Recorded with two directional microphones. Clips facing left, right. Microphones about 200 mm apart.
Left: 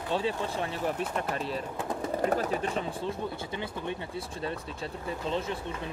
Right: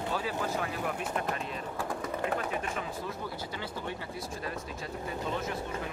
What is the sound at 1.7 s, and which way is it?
Speech, 20° left (ahead or behind).